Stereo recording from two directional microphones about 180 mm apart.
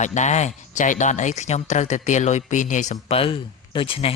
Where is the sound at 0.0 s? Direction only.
40° left (ahead or behind).